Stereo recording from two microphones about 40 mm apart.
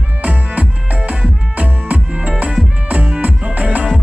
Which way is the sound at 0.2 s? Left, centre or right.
Right.